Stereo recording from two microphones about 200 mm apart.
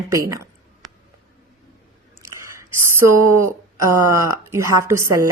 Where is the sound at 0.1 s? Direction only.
15° right (ahead or behind).